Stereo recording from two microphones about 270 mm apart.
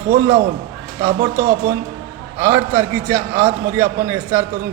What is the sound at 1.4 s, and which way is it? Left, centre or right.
Speech, right.